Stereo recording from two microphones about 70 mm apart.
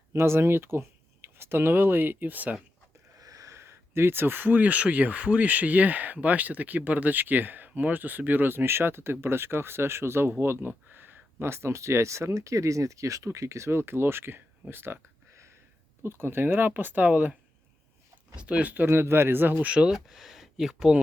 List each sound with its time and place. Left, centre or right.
0.1 s speech: right
3.2 s speech: right
16.0 s speech: right
18.3 s speech: centre
18.9 s speech: right
19.7 s speech: centre